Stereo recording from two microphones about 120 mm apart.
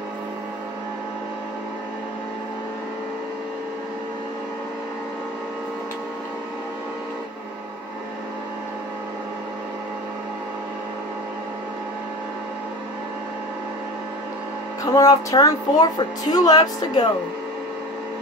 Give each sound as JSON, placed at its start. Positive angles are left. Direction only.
{"t": 15.0, "sound": "speech", "side_deg": 30}